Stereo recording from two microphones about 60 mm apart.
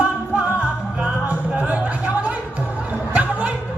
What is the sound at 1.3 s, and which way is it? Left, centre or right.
Chatter, right.